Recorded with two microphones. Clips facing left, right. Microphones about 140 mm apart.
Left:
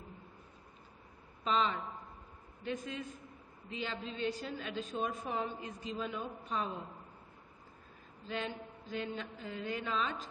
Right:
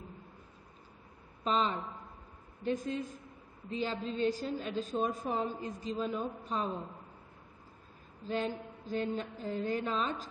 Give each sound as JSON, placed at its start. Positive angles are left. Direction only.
{"t": 1.4, "sound": "a woman's voice", "side_deg": -40}
{"t": 8.3, "sound": "a woman's voice", "side_deg": -40}